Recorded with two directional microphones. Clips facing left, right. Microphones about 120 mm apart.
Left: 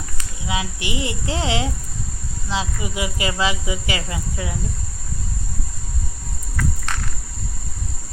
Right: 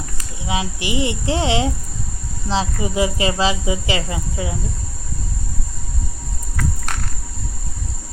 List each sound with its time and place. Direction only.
0.2 s speech: 25° right (ahead or behind)